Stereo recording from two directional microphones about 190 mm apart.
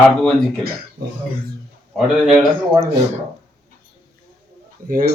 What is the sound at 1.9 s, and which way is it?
Speech, 10° right (ahead or behind).